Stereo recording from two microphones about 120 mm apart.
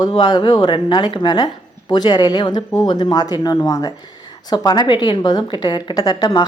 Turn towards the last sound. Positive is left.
turn(degrees=40)  # may be behind; listen again after turning